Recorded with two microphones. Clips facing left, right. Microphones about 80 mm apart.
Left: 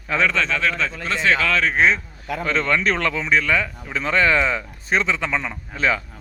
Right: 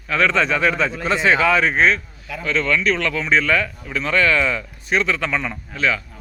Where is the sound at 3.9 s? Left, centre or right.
Left.